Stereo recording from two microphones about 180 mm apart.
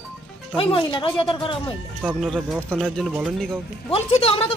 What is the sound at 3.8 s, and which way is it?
Speech, 35° left (ahead or behind).